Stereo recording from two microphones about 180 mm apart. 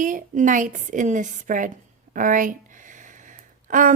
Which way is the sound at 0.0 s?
45° right (ahead or behind).